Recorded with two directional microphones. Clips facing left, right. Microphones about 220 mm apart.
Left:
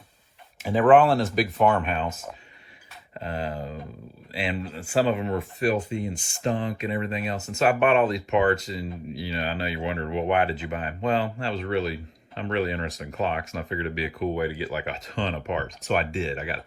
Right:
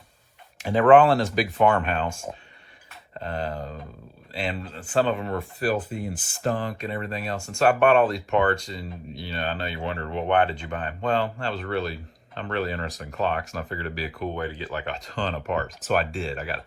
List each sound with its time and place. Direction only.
0.6 s speech: centre (ahead or behind)
2.0 s speech: 30° right (ahead or behind)
3.2 s a sound: 5° left (ahead or behind)
4.4 s speech: 5° left (ahead or behind)